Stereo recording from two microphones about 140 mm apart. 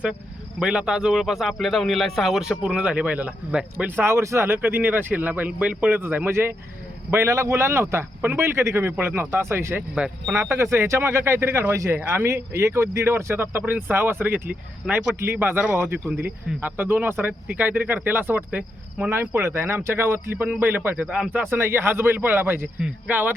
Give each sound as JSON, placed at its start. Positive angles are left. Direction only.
{"t": 0.6, "sound": "speech", "side_deg": -5}
{"t": 9.9, "sound": "speech", "side_deg": -5}
{"t": 10.3, "sound": "speech", "side_deg": -20}